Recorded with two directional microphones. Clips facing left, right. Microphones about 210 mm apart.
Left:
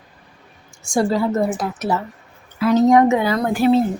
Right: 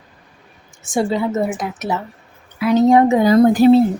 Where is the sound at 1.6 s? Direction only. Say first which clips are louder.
Left 1 dB; 20° right (ahead or behind); by 3.8 s 40° right (ahead or behind).